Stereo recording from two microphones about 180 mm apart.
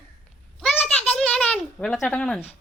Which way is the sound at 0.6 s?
5° left (ahead or behind).